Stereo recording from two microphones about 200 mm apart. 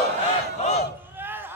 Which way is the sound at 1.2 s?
10° right (ahead or behind).